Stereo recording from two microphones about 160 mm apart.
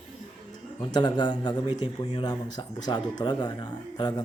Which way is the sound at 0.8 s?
30° left (ahead or behind).